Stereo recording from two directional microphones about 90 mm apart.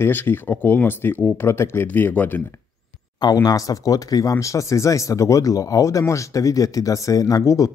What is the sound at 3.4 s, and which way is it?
Speech, 40° left (ahead or behind).